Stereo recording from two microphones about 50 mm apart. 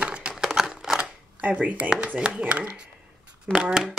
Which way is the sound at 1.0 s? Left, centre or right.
Right.